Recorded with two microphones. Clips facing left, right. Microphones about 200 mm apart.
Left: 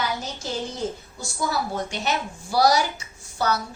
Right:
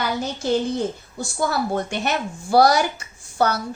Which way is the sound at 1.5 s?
55° right (ahead or behind).